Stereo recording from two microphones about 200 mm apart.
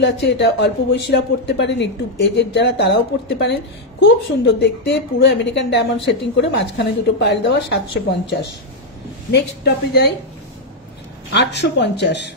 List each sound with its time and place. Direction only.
0.0 s a woman's voice: 60° left (ahead or behind)
11.3 s a woman's voice: 60° left (ahead or behind)